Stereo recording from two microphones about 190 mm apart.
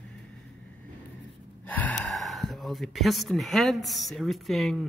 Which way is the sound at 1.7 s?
10° left (ahead or behind).